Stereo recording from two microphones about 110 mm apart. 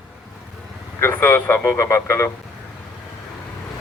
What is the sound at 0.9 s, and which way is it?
Speech, 20° left (ahead or behind).